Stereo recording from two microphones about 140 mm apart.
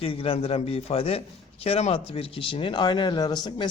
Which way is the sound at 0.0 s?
40° left (ahead or behind).